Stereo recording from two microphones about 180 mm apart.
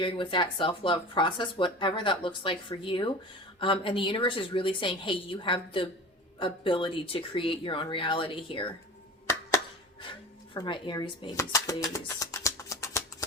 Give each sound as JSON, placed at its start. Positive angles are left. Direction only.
{"t": 0.0, "sound": "speech", "side_deg": 30}
{"t": 10.5, "sound": "speech", "side_deg": 25}
{"t": 11.3, "sound": "a sound", "side_deg": 15}